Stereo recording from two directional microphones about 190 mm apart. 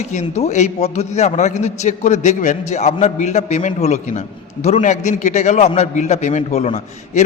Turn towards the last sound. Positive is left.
turn(degrees=35)  # may be behind; listen again after turning